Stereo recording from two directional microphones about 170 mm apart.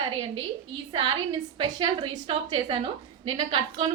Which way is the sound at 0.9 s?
25° right (ahead or behind).